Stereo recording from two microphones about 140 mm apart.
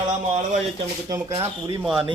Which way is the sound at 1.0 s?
30° right (ahead or behind).